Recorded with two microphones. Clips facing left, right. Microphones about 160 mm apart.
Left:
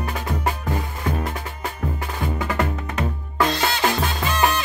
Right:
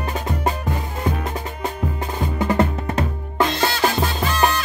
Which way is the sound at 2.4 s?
30° right (ahead or behind).